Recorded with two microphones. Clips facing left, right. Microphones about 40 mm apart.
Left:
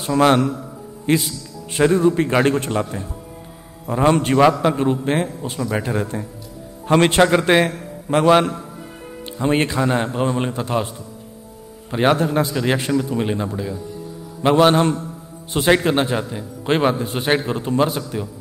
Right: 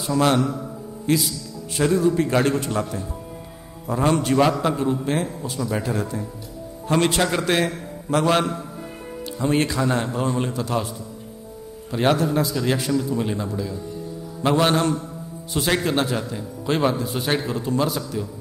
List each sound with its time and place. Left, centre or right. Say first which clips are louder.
0.0 s a man's voice: left 4 dB; left
7.2 s a man's voice: left 6 dB; left
16.6 s a man's voice: left 3 dB; left